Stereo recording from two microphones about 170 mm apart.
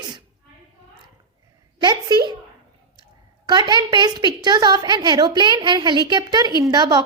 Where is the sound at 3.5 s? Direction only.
25° right (ahead or behind).